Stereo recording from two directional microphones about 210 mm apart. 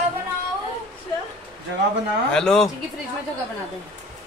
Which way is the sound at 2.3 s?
5° left (ahead or behind).